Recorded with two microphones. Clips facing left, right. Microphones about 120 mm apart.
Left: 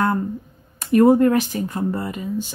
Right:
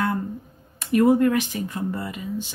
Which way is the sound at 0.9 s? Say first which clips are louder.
Left 4 dB; 40° left (ahead or behind).